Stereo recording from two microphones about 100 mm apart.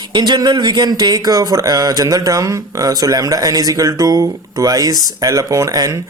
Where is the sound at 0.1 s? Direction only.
45° right (ahead or behind).